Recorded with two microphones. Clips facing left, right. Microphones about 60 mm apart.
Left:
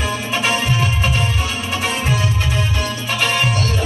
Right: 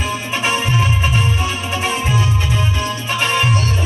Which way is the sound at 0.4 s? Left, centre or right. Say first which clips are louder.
Right 1 dB; centre.